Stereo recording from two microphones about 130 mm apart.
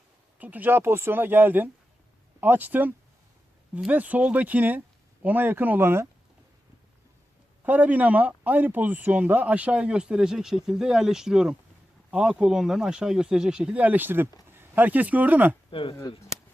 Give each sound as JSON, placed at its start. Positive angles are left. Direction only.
{"t": 0.3, "sound": "speech", "side_deg": -15}
{"t": 7.6, "sound": "speech", "side_deg": -15}
{"t": 15.7, "sound": "speech", "side_deg": 40}